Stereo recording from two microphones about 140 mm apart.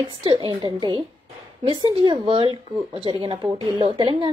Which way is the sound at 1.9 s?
35° right (ahead or behind).